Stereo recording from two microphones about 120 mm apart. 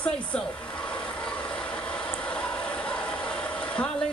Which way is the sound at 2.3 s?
10° left (ahead or behind).